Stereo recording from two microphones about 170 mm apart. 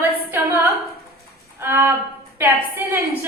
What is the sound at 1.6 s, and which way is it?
A woman's voice, 10° right (ahead or behind).